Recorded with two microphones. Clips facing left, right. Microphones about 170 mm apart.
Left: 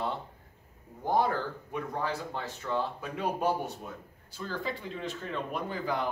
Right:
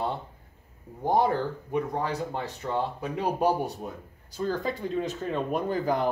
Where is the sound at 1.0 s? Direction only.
20° right (ahead or behind).